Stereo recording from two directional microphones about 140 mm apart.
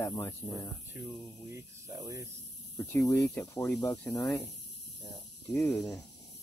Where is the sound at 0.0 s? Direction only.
10° left (ahead or behind).